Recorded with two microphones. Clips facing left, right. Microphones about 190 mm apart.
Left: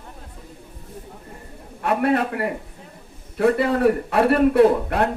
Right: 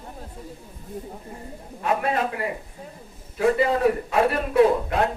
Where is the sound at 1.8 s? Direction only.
60° left (ahead or behind).